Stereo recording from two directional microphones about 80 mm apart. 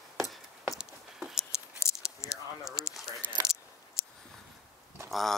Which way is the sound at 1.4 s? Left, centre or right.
Left.